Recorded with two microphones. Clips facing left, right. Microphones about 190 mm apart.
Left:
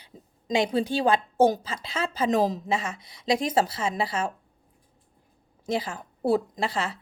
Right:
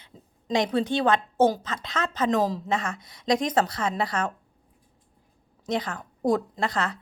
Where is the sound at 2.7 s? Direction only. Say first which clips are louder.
Even; 5° left (ahead or behind).